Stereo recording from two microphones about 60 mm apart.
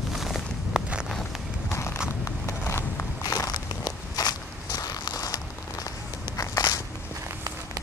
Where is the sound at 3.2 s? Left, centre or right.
Left.